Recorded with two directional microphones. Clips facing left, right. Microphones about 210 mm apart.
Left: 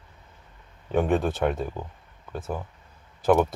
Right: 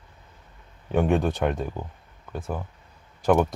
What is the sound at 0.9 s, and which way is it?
Speech, centre (ahead or behind).